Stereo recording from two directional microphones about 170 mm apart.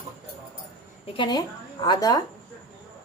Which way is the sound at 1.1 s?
25° left (ahead or behind).